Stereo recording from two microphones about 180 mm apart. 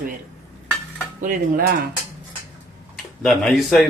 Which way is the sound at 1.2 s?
55° right (ahead or behind).